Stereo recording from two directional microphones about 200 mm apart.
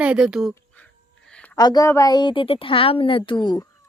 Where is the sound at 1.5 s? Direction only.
20° left (ahead or behind).